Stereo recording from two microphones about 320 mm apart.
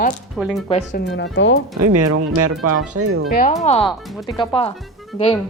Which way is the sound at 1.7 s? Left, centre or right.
Right.